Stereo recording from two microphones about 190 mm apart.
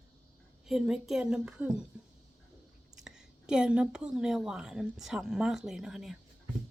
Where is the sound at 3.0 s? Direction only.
5° right (ahead or behind).